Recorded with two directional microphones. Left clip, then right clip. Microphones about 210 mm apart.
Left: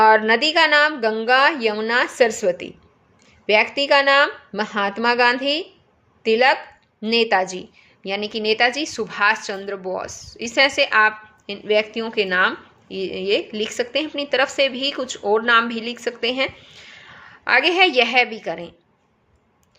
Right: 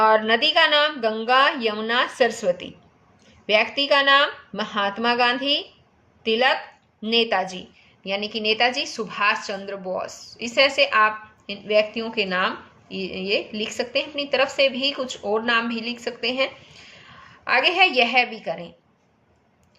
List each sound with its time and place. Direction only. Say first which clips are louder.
0.0 s a woman's voice: left 3 dB; 40° left (ahead or behind)